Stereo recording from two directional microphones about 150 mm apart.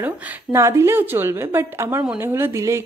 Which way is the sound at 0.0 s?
20° right (ahead or behind).